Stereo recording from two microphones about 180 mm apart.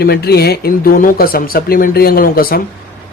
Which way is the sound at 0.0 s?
60° left (ahead or behind).